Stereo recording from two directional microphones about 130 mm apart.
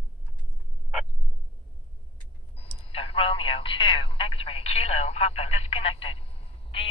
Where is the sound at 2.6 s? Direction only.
45° left (ahead or behind).